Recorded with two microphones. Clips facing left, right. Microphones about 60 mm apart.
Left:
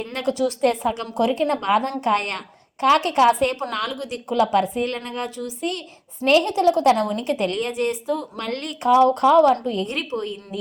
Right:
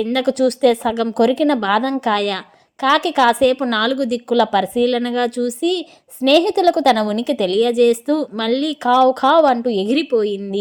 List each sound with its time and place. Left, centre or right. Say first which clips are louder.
0.0 s speech: right 7 dB; right